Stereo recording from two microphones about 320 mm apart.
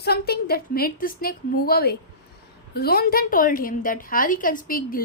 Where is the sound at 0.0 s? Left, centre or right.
Left.